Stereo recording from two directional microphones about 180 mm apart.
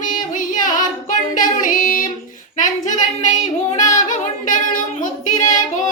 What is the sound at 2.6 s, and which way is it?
Child singing, 45° left (ahead or behind).